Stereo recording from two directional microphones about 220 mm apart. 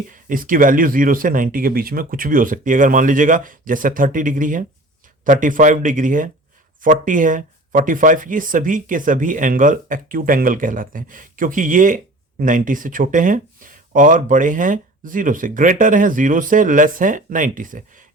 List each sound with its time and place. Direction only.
0.1 s speech: 40° right (ahead or behind)